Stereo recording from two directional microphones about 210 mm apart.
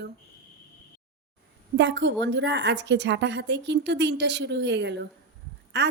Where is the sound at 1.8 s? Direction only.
55° right (ahead or behind).